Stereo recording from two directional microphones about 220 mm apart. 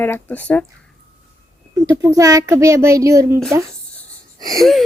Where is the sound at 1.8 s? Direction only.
15° right (ahead or behind).